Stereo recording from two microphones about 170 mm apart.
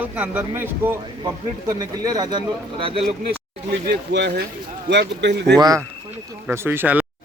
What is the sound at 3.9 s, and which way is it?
A man's voice, 85° right.